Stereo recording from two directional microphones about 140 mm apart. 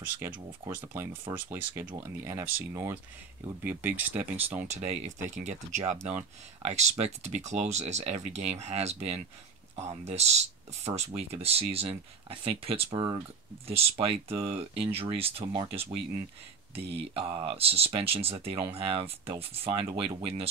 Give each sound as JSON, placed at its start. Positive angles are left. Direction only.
{"t": 0.0, "sound": "speech", "side_deg": -15}
{"t": 4.6, "sound": "speech", "side_deg": -50}